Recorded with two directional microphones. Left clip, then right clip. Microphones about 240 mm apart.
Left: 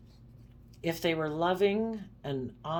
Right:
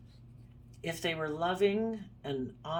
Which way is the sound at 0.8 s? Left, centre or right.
Left.